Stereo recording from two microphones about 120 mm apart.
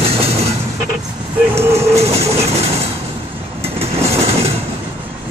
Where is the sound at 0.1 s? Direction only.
60° right (ahead or behind).